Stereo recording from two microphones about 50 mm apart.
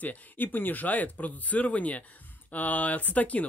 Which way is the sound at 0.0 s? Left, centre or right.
Left.